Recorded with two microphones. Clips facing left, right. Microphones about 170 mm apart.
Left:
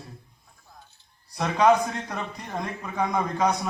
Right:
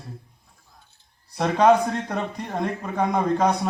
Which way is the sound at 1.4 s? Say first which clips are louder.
Right 3 dB; 50° right (ahead or behind).